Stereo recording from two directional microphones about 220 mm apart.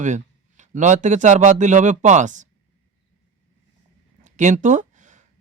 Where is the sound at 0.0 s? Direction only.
35° right (ahead or behind).